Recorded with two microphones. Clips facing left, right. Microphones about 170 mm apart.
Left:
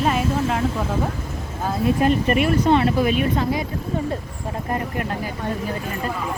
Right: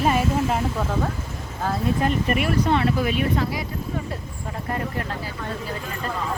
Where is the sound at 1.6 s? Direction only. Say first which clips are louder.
Left 4 dB; 20° left (ahead or behind).